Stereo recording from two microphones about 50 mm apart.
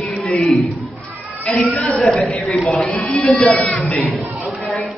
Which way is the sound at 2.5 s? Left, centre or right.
Centre.